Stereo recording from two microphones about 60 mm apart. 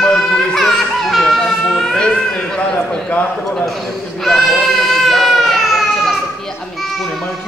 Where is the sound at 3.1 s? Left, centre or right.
Left.